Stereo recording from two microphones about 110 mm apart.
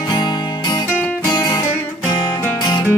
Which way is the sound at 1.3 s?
35° left (ahead or behind).